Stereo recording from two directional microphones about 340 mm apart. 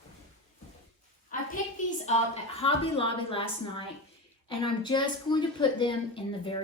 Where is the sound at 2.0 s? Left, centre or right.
Centre.